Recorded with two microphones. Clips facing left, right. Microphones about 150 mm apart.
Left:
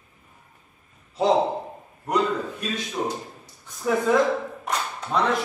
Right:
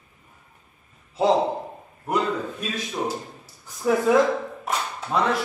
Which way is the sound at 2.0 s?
5° right (ahead or behind).